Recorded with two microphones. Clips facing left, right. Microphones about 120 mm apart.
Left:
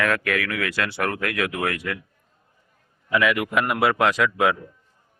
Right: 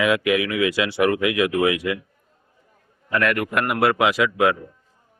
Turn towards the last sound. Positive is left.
turn(degrees=0)  # may be behind; listen again after turning